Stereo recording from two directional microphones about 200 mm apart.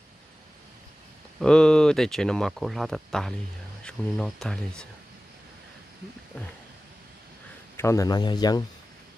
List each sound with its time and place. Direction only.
1.4 s speech: 5° left (ahead or behind)
7.7 s speech: 15° left (ahead or behind)